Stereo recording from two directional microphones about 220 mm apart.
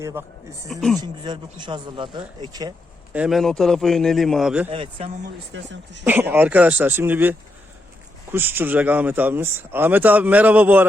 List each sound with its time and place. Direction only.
0.0 s speech: 15° right (ahead or behind)
0.7 s a man's voice: centre (ahead or behind)
1.0 s speech: 20° right (ahead or behind)
3.1 s a man's voice: 5° right (ahead or behind)
4.7 s speech: 25° right (ahead or behind)
6.3 s speech: 10° right (ahead or behind)